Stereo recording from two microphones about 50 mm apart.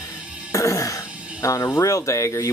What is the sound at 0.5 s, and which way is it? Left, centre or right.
Speech, left.